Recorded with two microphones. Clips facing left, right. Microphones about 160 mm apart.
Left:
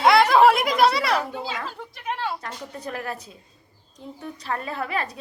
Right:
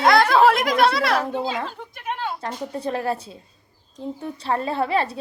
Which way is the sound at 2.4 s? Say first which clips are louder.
Right 7 dB; 30° right (ahead or behind).